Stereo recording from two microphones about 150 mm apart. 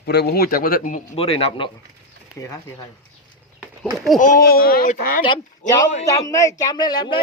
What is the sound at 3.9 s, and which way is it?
Speech, centre (ahead or behind).